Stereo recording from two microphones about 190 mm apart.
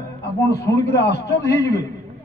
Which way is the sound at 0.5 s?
60° left (ahead or behind).